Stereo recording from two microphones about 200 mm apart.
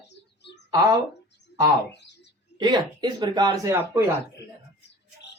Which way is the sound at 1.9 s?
60° left (ahead or behind).